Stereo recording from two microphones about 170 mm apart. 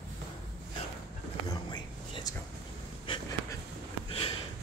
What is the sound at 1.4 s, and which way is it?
Whispering, 25° left (ahead or behind).